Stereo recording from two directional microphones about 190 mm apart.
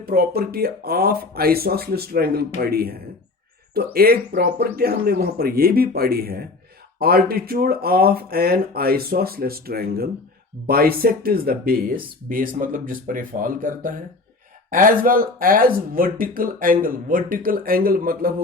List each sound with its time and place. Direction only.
0.0 s speech: 50° right (ahead or behind)
3.9 s speech: 55° right (ahead or behind)